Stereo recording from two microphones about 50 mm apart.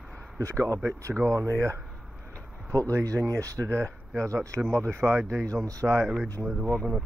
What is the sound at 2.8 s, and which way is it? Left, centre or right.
Speech, right.